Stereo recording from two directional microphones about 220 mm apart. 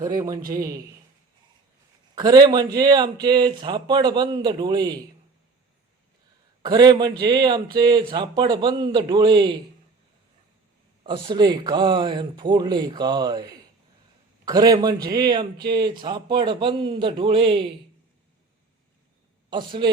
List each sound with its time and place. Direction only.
0.0 s a man's voice: 15° right (ahead or behind)
2.1 s a man's voice: 20° right (ahead or behind)
6.6 s a man's voice: 20° right (ahead or behind)
11.0 s a man's voice: 20° right (ahead or behind)
19.5 s a man's voice: 20° right (ahead or behind)